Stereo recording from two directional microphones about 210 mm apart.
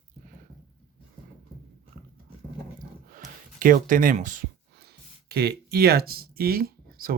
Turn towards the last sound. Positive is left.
turn(degrees=-45)  # may be behind; listen again after turning